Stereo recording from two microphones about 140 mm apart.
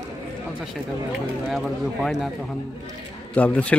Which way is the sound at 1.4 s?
Centre (ahead or behind).